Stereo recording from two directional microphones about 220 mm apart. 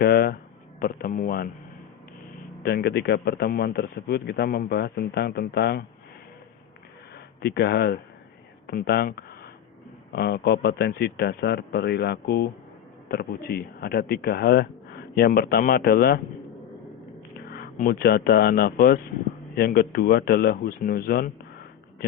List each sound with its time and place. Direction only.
0.0 s speech: 45° left (ahead or behind)
2.6 s speech: 45° left (ahead or behind)
7.4 s speech: 50° left (ahead or behind)
17.3 s speech: 40° left (ahead or behind)